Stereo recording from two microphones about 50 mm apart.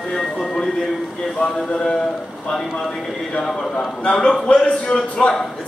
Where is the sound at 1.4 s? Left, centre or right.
Centre.